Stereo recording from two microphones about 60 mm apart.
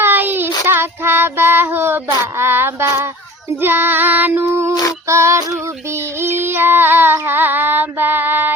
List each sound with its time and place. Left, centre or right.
0.0 s child singing: right
3.6 s female singing: right
4.4 s a sound: right
5.0 s female singing: right